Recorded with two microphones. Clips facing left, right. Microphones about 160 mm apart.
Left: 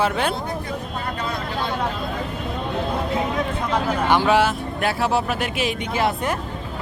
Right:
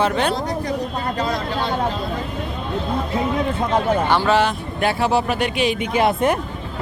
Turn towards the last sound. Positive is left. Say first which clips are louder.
# right 5 dB
turn(degrees=-20)  # may be behind; listen again after turning